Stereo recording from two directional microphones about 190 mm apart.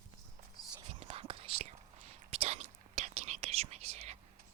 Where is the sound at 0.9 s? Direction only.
30° right (ahead or behind).